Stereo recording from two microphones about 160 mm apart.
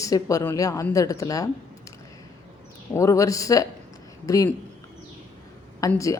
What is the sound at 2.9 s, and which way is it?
A woman's voice, 20° left (ahead or behind).